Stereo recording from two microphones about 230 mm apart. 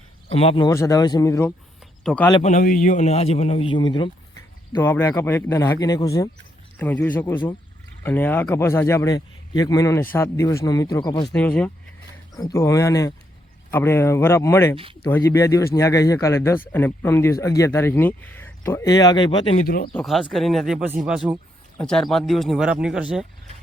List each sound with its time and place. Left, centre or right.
0.3 s a man's voice: left; by 2.3 s centre
2.3 s a man's voice: left
11.3 s a man's voice: centre
19.6 s speech: left
19.9 s speech: centre